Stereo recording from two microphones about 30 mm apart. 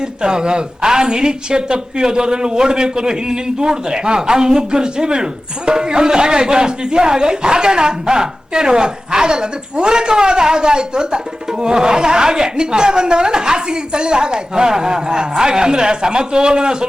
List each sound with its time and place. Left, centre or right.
0.0 s a woman's voice: right